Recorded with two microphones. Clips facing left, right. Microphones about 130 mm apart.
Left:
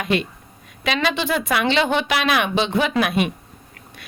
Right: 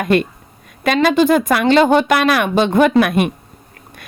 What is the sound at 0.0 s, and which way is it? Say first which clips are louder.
Speech: right 7 dB; 50° right (ahead or behind).